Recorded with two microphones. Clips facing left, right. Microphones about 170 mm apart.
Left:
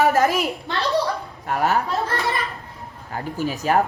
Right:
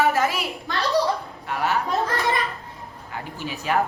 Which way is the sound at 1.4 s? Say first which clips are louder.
Left 4 dB; 45° left (ahead or behind).